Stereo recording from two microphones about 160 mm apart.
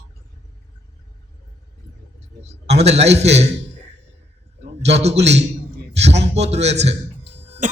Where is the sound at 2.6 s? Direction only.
40° right (ahead or behind).